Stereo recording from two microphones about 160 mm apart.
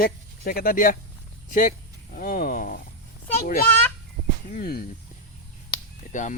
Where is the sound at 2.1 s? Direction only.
60° left (ahead or behind).